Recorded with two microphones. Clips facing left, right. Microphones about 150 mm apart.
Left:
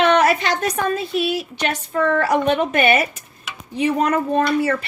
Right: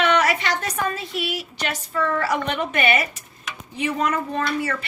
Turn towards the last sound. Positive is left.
turn(degrees=40)  # may be behind; listen again after turning